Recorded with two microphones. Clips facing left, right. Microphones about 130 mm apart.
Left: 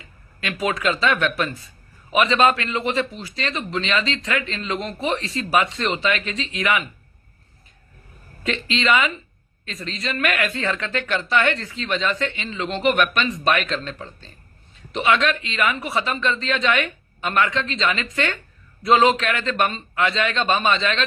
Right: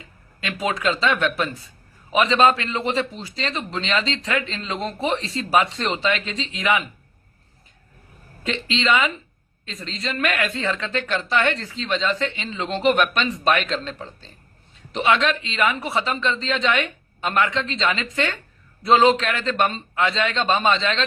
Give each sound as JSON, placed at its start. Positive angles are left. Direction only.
{"t": 0.0, "sound": "a man's voice", "side_deg": -25}
{"t": 8.4, "sound": "a man's voice", "side_deg": -25}